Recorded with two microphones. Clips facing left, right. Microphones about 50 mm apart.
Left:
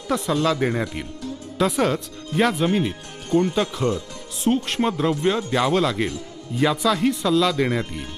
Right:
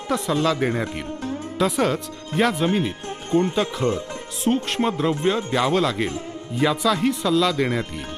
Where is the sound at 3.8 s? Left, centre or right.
Right.